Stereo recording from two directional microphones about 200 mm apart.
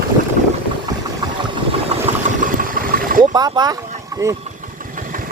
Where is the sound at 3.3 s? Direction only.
20° right (ahead or behind).